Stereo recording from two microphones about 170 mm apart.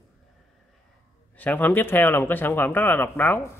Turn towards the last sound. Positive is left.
turn(degrees=10)  # may be behind; listen again after turning